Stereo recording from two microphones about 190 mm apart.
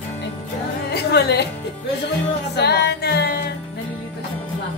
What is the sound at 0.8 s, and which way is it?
Music, 60° left (ahead or behind).